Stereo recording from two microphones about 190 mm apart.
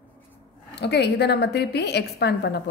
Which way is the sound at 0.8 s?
60° left (ahead or behind).